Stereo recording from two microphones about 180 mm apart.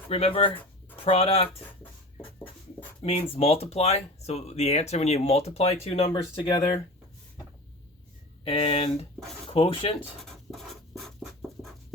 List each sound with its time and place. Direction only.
0.1 s speech: 30° left (ahead or behind)
3.0 s speech: 30° left (ahead or behind)
6.4 s speech: 20° left (ahead or behind)
8.4 s speech: 30° left (ahead or behind)
10.2 s scratch: centre (ahead or behind)